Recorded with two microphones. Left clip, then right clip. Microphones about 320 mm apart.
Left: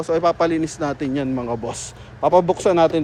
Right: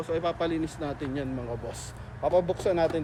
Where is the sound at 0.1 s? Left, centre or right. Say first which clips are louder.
Left 11 dB; left.